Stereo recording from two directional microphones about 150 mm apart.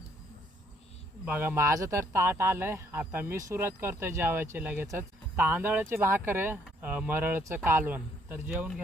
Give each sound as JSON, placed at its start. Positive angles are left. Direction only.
{"t": 1.2, "sound": "speech", "side_deg": -10}